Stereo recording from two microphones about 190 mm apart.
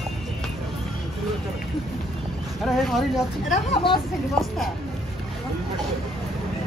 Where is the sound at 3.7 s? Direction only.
25° left (ahead or behind).